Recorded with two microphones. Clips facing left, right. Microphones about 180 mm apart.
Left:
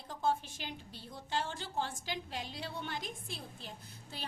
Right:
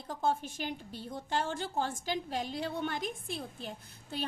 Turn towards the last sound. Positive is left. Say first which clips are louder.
# right 9 dB
turn(degrees=-55)  # may be behind; listen again after turning